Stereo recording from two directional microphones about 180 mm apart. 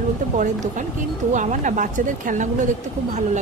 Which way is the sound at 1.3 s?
45° right (ahead or behind).